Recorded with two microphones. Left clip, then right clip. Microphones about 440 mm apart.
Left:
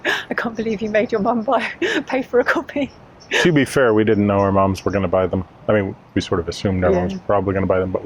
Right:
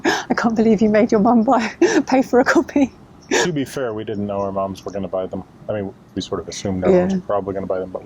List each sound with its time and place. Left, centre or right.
0.0 s speech: right
3.5 s speech: left